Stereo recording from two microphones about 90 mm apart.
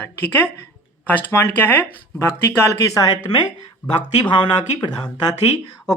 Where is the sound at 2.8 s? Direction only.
40° left (ahead or behind).